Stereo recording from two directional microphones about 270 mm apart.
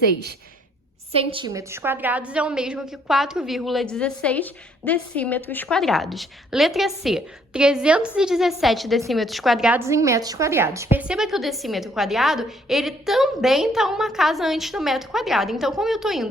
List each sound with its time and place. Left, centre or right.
1.1 s a woman's voice: centre